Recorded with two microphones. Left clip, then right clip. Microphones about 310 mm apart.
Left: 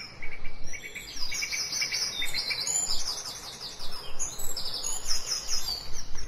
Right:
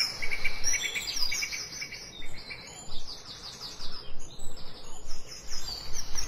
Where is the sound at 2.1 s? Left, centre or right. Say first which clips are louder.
Left 12 dB; left.